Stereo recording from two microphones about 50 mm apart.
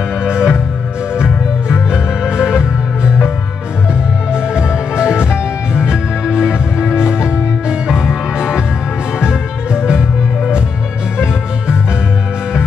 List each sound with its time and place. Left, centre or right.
0.2 s music: centre
4.3 s music: centre